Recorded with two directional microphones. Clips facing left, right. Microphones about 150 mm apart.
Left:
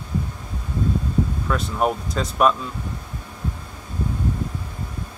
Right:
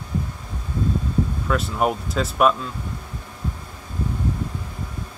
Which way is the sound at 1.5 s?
5° right (ahead or behind).